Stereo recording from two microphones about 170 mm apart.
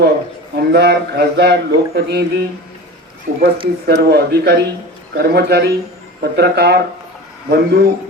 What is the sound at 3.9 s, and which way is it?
Speech, 70° right (ahead or behind).